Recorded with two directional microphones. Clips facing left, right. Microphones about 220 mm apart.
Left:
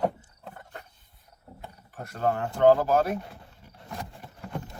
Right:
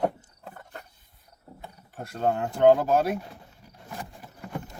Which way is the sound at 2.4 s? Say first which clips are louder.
Right 1 dB; 15° right (ahead or behind).